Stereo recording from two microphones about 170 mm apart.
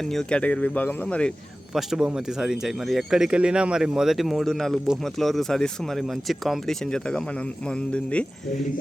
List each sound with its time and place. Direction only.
0.0 s speech: centre (ahead or behind)